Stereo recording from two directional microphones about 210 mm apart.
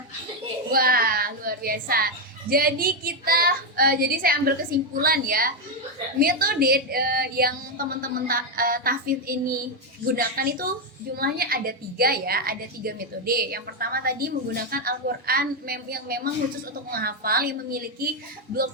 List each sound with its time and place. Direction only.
0.7 s a child's voice: 45° right (ahead or behind)